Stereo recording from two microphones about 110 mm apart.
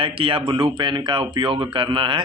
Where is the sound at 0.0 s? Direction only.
55° right (ahead or behind).